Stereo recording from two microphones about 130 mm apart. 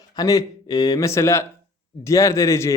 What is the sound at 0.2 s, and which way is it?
Speech, 30° left (ahead or behind).